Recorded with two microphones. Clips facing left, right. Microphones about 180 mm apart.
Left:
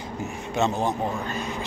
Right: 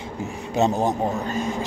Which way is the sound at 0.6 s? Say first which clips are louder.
Right 4 dB; 40° right (ahead or behind).